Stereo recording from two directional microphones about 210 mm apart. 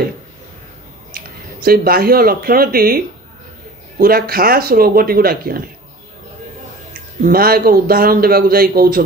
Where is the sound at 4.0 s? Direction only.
45° right (ahead or behind).